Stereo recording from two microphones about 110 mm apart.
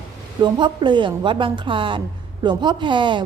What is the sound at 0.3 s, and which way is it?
A woman's voice, 45° right (ahead or behind).